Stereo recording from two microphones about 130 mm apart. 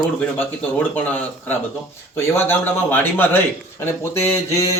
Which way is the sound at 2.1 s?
15° left (ahead or behind).